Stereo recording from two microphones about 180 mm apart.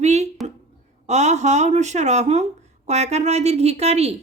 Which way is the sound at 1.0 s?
40° right (ahead or behind).